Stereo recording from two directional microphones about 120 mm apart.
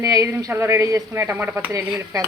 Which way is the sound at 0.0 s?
25° right (ahead or behind).